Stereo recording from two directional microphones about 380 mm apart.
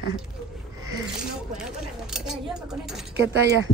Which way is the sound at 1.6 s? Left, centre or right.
Centre.